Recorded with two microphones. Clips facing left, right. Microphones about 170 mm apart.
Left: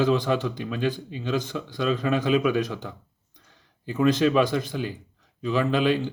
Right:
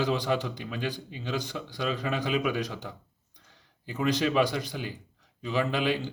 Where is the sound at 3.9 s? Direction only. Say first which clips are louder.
Left 6 dB; 50° left (ahead or behind).